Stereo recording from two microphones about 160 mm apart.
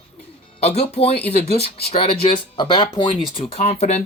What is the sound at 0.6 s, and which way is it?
Speech, 40° left (ahead or behind).